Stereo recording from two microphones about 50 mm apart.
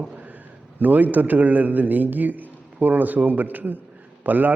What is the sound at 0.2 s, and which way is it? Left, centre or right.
A man's voice, right.